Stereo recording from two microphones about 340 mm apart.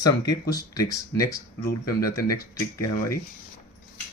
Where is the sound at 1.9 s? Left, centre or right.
Left.